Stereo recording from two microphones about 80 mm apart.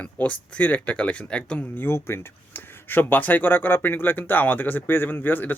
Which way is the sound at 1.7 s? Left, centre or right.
Left.